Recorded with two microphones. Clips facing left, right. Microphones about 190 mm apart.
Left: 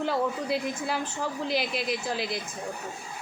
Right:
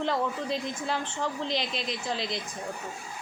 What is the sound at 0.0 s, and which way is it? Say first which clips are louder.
Speech: left 1 dB; 10° left (ahead or behind).